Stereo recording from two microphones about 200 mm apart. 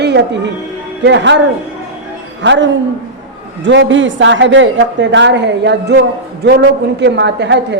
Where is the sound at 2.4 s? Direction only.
65° right (ahead or behind).